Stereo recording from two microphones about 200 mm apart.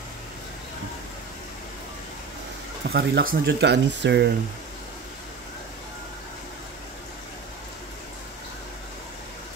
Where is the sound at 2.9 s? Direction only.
50° right (ahead or behind).